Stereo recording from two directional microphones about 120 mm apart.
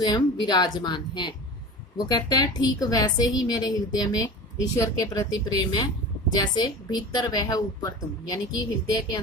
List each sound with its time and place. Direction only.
0.0 s a woman's voice: 35° left (ahead or behind)